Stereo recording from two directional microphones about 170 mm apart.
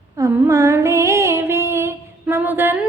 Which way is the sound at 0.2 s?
15° right (ahead or behind).